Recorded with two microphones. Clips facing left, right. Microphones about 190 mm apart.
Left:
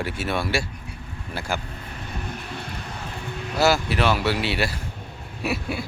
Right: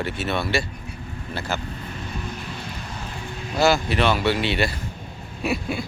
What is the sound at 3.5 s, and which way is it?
Speech, 5° left (ahead or behind).